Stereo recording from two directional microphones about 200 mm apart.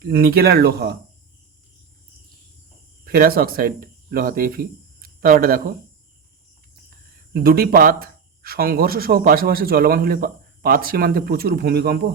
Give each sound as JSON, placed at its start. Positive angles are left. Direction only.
{"t": 0.0, "sound": "speech", "side_deg": -50}
{"t": 3.0, "sound": "speech", "side_deg": -50}
{"t": 7.3, "sound": "speech", "side_deg": -50}